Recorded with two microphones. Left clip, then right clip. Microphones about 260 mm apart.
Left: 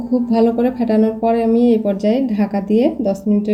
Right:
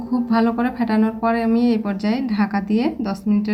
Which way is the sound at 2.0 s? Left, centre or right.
Right.